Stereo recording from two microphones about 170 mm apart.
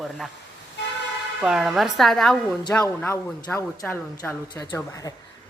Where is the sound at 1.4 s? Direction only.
5° right (ahead or behind).